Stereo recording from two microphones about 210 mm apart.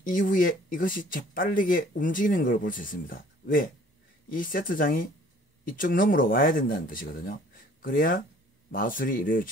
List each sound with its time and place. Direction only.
0.0 s speech: 40° left (ahead or behind)